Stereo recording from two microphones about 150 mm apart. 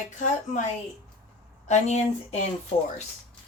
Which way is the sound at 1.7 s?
50° left (ahead or behind).